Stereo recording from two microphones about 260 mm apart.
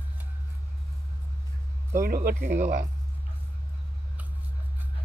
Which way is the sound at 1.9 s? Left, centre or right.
Right.